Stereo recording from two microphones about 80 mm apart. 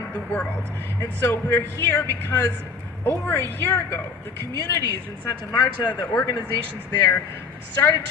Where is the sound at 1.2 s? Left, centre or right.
Left.